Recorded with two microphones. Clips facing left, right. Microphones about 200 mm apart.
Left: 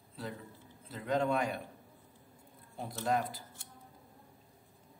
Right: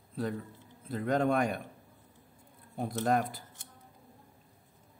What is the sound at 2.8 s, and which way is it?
Speech, 55° right (ahead or behind).